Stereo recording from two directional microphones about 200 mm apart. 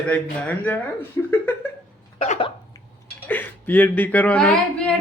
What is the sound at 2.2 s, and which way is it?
Cough, 30° left (ahead or behind).